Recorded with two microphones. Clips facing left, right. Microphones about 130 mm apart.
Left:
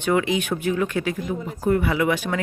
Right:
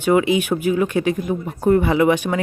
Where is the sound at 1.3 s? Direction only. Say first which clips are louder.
Right 5 dB; 30° right (ahead or behind).